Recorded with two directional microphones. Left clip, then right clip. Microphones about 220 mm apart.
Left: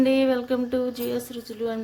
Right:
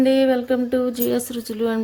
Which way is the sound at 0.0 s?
10° right (ahead or behind).